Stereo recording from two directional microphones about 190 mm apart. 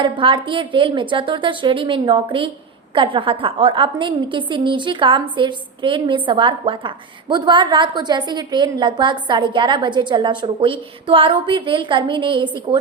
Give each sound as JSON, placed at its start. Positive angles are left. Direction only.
{"t": 0.0, "sound": "a woman's voice", "side_deg": -25}